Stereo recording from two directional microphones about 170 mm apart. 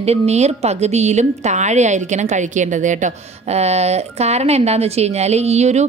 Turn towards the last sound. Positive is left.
turn(degrees=-40)  # may be behind; listen again after turning